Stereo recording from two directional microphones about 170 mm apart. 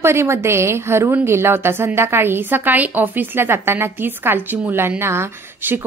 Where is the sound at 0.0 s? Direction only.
15° right (ahead or behind).